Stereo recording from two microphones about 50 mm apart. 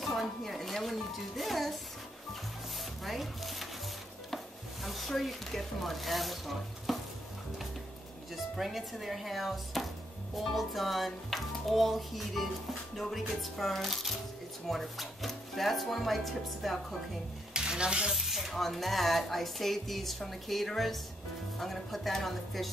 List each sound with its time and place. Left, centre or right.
0.0 s a woman's voice: centre
2.8 s chopping: centre
4.8 s a woman's voice: centre
8.5 s a woman's voice: centre
17.6 s stir: centre
18.1 s a woman's voice: centre